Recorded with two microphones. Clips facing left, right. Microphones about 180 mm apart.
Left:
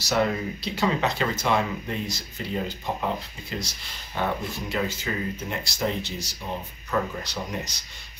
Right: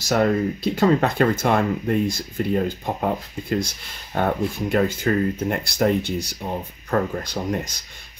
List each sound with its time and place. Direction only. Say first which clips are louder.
0.0 s speech: right 5 dB; 50° right (ahead or behind)